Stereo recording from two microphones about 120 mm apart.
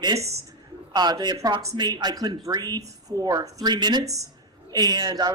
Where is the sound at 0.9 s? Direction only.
35° right (ahead or behind).